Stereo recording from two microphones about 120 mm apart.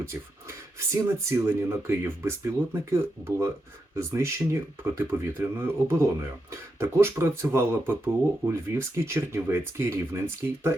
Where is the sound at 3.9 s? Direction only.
25° right (ahead or behind).